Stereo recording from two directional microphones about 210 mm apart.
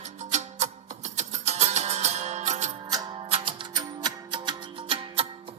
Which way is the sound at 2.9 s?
20° right (ahead or behind).